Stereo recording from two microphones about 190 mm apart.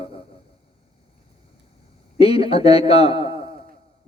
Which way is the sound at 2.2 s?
30° left (ahead or behind).